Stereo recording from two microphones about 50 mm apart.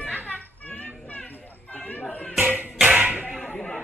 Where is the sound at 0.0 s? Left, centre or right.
Left.